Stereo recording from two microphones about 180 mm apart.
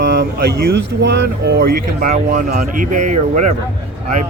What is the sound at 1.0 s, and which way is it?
Speech, 65° right (ahead or behind).